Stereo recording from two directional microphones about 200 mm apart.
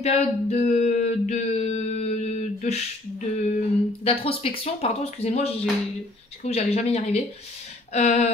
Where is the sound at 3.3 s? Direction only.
35° left (ahead or behind).